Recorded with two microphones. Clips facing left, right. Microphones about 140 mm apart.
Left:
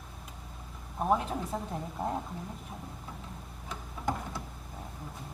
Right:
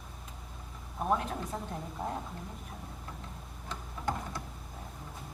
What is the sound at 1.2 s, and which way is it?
Speech, 5° left (ahead or behind).